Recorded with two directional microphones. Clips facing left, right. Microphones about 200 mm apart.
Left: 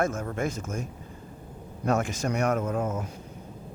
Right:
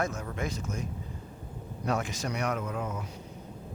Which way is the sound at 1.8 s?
50° left (ahead or behind).